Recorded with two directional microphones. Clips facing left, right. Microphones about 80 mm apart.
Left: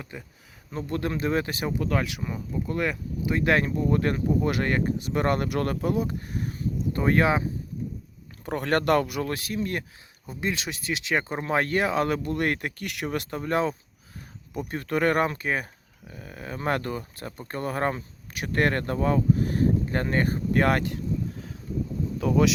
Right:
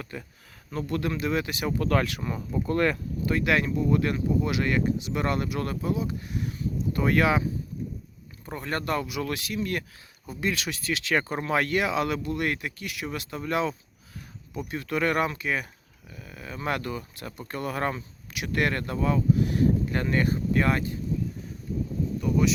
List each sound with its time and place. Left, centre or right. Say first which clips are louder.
0.0 s speech: right 2 dB; centre
0.7 s speech: even; left
1.8 s speech: right 4 dB; centre
3.3 s speech: left 1 dB; left
8.4 s speech: left 7 dB; left
9.2 s speech: left 1 dB; left; by 11.4 s centre
11.4 s speech: left 1 dB; left
22.2 s speech: left 3 dB; left